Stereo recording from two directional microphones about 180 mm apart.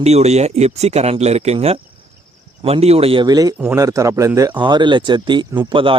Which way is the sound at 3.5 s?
10° right (ahead or behind).